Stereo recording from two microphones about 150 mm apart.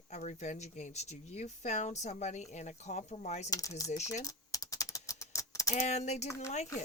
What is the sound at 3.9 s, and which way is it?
Speech, 50° left (ahead or behind).